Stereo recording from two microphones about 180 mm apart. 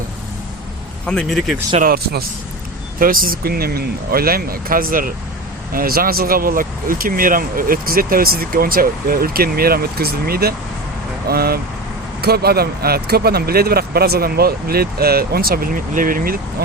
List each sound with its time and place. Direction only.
1.0 s speech: 5° left (ahead or behind)
1.8 s speech: 55° right (ahead or behind)